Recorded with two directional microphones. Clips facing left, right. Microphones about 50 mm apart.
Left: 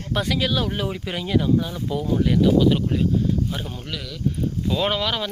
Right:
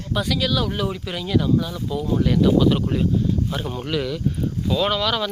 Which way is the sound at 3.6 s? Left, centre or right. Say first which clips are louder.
Right 7 dB; centre.